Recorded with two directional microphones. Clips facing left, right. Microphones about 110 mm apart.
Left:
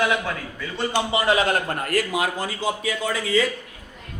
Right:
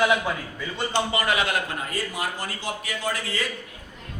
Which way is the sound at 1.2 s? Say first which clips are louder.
Left 4 dB; 35° left (ahead or behind).